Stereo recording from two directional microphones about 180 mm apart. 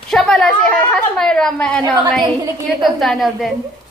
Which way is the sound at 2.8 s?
Centre (ahead or behind).